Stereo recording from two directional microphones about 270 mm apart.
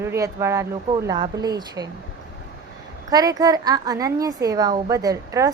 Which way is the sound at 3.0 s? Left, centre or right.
Centre.